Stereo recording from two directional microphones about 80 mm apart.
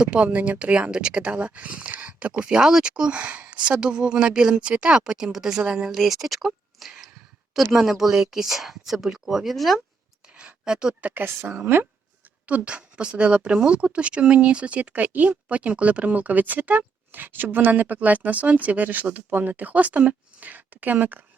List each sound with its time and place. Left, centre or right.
0.0 s speech: centre
10.3 s speech: centre
11.1 s speech: right
12.5 s speech: centre